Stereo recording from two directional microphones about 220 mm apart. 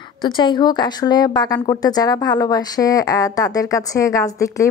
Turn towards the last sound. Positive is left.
turn(degrees=15)  # may be behind; listen again after turning